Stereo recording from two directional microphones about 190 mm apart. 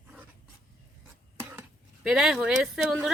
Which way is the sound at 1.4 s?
10° right (ahead or behind).